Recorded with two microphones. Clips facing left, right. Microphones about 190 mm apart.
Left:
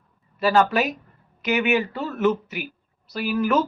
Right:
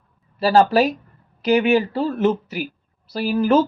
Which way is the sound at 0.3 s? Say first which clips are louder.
Right 4 dB; 30° right (ahead or behind).